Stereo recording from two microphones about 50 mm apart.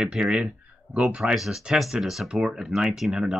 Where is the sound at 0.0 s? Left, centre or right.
Centre.